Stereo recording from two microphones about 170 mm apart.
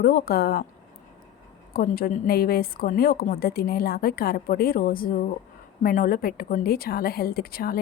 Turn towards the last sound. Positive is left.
turn(degrees=60)  # may be behind; listen again after turning